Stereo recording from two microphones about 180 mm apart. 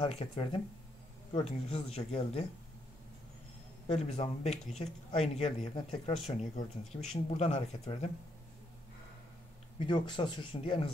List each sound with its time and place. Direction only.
0.0 s speech: 30° left (ahead or behind)
3.9 s speech: 35° left (ahead or behind)
9.8 s speech: 25° left (ahead or behind)